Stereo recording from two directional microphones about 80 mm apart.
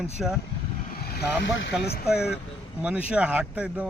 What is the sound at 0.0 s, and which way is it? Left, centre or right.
Speech, centre.